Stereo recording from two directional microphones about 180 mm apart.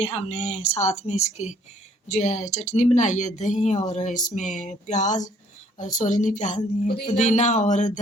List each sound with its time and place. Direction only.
0.0 s speech: 35° left (ahead or behind)